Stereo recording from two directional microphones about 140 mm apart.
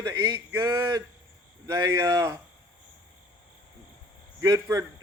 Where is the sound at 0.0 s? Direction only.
25° right (ahead or behind).